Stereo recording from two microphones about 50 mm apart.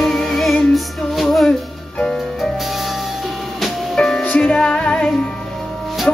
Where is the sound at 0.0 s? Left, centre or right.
Centre.